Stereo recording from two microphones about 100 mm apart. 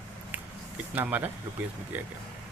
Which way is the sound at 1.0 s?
15° right (ahead or behind).